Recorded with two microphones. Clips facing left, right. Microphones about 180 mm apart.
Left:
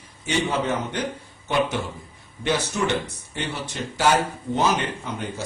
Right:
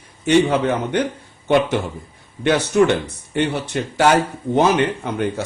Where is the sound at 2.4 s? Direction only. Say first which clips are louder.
Right 8 dB; 65° right (ahead or behind).